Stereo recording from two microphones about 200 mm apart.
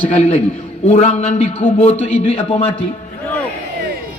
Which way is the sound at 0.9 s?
35° left (ahead or behind).